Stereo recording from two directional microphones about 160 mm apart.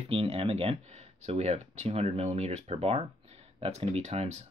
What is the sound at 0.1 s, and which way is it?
Speech, 35° right (ahead or behind).